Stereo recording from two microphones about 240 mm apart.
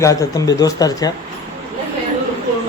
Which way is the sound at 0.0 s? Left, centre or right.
Centre.